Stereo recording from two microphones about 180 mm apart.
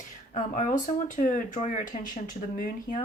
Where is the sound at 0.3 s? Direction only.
45° left (ahead or behind).